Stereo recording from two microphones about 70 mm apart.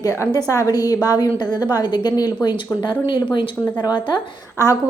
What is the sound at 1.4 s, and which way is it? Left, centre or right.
A woman's voice, left.